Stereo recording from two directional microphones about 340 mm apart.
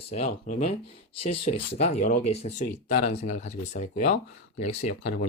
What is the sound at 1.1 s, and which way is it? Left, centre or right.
Speech, left.